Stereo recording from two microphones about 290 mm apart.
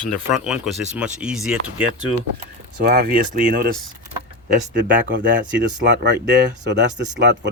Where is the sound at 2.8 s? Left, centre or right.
Right.